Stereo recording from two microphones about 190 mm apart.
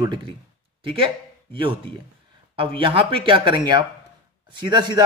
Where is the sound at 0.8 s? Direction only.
25° right (ahead or behind).